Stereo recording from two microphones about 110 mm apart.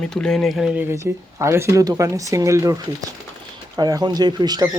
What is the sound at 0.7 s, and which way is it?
Speech, 25° right (ahead or behind).